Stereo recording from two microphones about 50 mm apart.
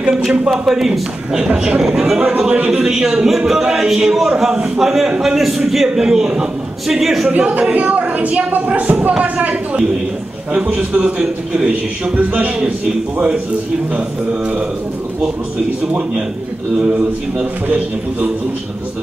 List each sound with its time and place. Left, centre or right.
0.1 s a man's voice: centre
0.5 s a man's voice: centre
1.4 s speech: right
1.8 s a man's voice: centre
2.2 s speech: right
2.8 s a man's voice: centre
7.2 s speech: right
17.6 s a man's voice: right